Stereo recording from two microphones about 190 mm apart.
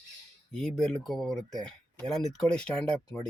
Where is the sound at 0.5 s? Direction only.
Centre (ahead or behind).